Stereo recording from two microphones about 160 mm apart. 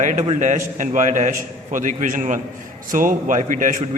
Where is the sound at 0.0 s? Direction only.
50° right (ahead or behind).